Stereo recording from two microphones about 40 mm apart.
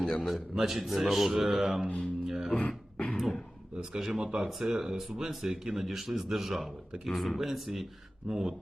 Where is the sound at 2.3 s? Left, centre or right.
Centre.